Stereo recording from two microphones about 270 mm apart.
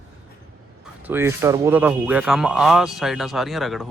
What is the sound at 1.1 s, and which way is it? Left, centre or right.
A man's voice, centre.